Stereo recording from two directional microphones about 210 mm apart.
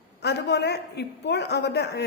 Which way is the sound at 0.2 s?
55° left (ahead or behind).